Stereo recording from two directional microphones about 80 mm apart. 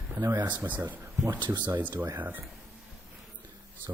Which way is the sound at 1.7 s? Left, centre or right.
Right.